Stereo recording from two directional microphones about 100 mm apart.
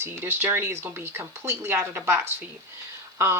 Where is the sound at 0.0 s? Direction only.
25° right (ahead or behind).